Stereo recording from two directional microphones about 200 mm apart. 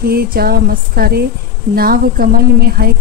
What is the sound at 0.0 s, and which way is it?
Speech, 50° right (ahead or behind).